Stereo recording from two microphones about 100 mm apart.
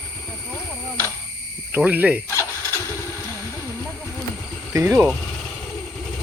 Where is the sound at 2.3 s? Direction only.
25° left (ahead or behind).